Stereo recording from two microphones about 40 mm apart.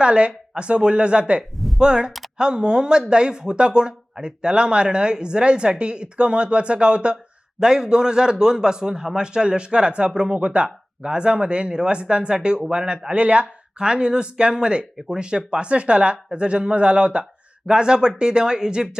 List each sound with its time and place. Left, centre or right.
0.0 s speech: right
1.5 s a sound: centre
1.8 s speech: right
14.9 s speech: centre
15.2 s speech: right